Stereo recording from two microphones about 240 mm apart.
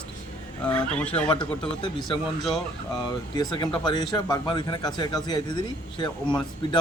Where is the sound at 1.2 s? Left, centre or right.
Centre.